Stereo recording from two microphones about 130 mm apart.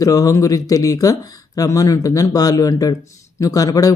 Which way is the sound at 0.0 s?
25° left (ahead or behind).